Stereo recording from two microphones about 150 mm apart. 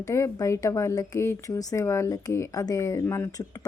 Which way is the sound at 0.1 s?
20° left (ahead or behind).